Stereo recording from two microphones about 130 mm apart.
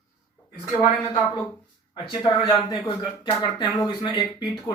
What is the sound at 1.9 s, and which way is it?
Speech, 35° left (ahead or behind).